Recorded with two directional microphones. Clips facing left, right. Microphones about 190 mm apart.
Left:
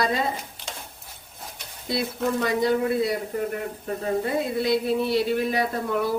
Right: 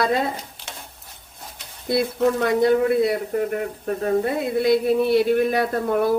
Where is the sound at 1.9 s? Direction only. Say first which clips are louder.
Right 6 dB; 55° right (ahead or behind).